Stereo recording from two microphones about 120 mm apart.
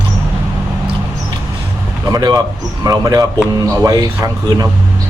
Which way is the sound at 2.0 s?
30° right (ahead or behind).